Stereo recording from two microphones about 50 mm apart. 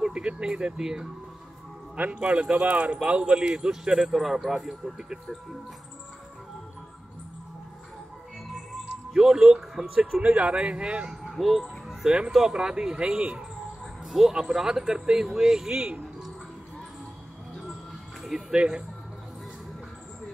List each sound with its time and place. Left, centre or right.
0.1 s speech: centre
2.0 s speech: right
9.1 s speech: centre
10.2 s speech: right
11.1 s speech: centre
14.0 s speech: centre
15.7 s speech: right
18.5 s speech: centre